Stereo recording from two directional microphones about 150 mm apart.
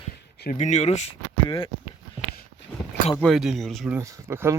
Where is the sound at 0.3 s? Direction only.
80° left.